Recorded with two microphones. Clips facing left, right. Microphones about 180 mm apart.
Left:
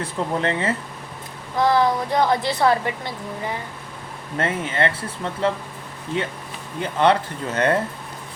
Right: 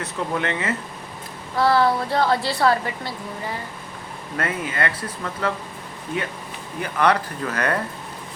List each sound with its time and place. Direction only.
0.0 s speech: 30° left (ahead or behind)
1.5 s a woman's voice: 20° left (ahead or behind)
4.4 s a woman's voice: 25° left (ahead or behind)
6.7 s a woman's voice: 25° left (ahead or behind)